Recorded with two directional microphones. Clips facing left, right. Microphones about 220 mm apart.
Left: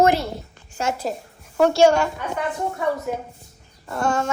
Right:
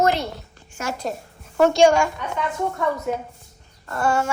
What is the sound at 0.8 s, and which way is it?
Speech, 30° left (ahead or behind).